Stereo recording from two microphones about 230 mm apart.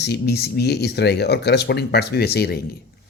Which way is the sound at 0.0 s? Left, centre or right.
Left.